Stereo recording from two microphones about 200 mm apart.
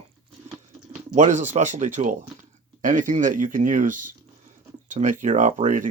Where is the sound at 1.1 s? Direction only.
35° right (ahead or behind).